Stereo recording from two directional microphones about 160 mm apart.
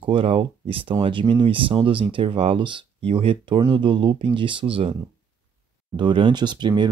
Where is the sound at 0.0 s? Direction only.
35° right (ahead or behind).